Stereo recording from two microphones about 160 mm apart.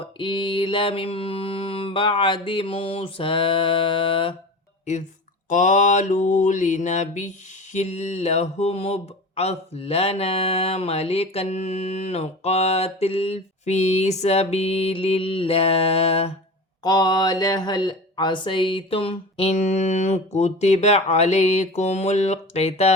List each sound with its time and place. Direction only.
0.2 s mantra: 30° left (ahead or behind)
5.5 s mantra: 50° left (ahead or behind)
16.8 s mantra: 25° left (ahead or behind)